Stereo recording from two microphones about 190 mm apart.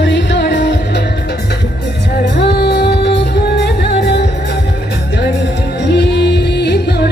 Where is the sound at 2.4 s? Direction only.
65° left (ahead or behind).